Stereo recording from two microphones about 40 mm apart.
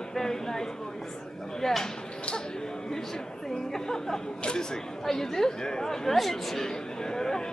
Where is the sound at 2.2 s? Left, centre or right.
Centre.